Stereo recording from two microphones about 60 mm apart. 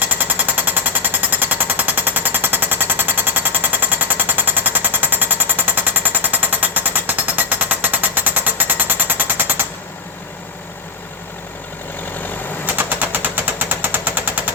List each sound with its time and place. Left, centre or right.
0.0 s jackhammer: right
12.6 s machine gun: right